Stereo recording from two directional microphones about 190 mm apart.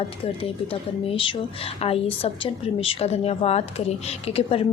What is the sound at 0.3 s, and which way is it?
A woman's voice, 30° left (ahead or behind).